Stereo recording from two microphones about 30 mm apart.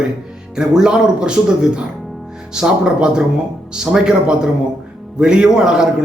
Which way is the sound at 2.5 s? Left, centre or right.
Right.